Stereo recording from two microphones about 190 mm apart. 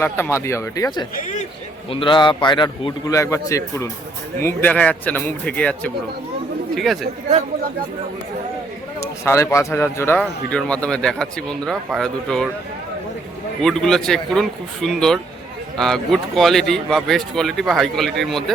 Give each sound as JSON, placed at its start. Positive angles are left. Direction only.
{"t": 0.0, "sound": "speech", "side_deg": 15}
{"t": 1.1, "sound": "a man's voice", "side_deg": 40}
{"t": 1.9, "sound": "a man's voice", "side_deg": 25}
{"t": 9.2, "sound": "speech", "side_deg": 15}
{"t": 13.6, "sound": "speech", "side_deg": 5}